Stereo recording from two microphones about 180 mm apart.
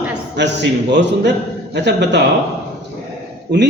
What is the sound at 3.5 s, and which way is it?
Speech, 75° right (ahead or behind).